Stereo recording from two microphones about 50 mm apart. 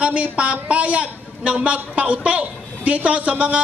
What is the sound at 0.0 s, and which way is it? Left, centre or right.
A man's voice, right.